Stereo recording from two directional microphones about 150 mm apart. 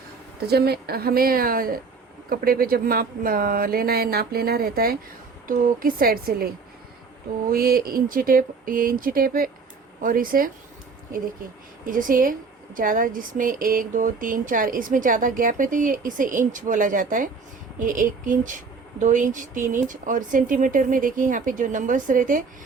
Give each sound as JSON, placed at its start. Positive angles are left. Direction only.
{"t": 0.3, "sound": "speech", "side_deg": -90}
{"t": 5.5, "sound": "speech", "side_deg": -70}
{"t": 7.5, "sound": "speech", "side_deg": -80}
{"t": 11.9, "sound": "a woman's voice", "side_deg": -65}